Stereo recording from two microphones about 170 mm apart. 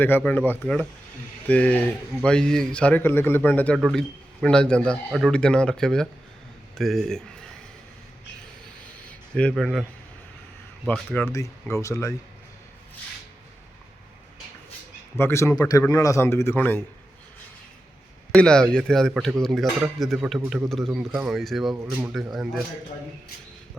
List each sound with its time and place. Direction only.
0.0 s a man's voice: 10° left (ahead or behind)
3.8 s a man's voice: centre (ahead or behind)
9.0 s a sound: 5° left (ahead or behind)
10.8 s a man's voice: 10° left (ahead or behind)
11.3 s speech: 20° left (ahead or behind)
15.2 s a man's voice: 15° left (ahead or behind)
18.3 s a man's voice: 5° left (ahead or behind)